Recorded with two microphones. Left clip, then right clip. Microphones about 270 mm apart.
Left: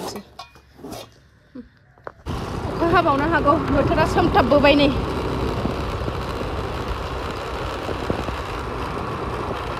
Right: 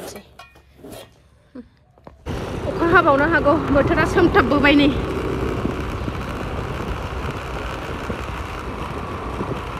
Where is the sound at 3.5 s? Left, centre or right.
Centre.